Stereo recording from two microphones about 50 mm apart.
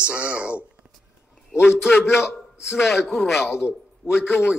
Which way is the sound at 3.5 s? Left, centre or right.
Right.